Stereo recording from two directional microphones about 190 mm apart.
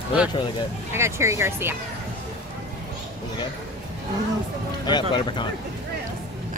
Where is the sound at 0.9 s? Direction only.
15° right (ahead or behind).